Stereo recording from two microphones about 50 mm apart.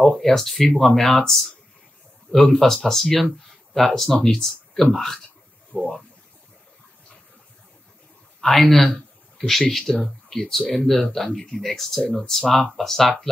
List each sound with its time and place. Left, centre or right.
0.0 s speech: centre
5.7 s a sound: centre
8.4 s speech: centre